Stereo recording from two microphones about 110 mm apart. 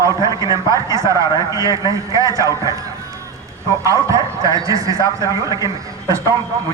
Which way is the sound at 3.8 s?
30° right (ahead or behind).